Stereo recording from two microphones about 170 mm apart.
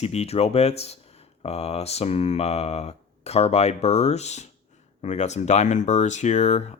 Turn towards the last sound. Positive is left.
turn(degrees=40)  # may be behind; listen again after turning